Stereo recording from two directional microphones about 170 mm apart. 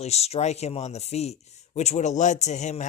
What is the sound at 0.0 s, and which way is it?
Speech, 40° left (ahead or behind).